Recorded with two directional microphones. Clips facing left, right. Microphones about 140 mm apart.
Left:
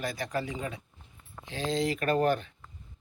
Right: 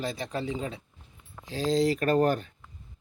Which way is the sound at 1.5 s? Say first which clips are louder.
Right 5 dB; 40° right (ahead or behind).